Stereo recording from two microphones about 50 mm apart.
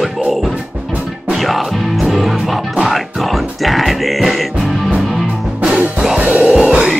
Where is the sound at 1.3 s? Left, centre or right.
Centre.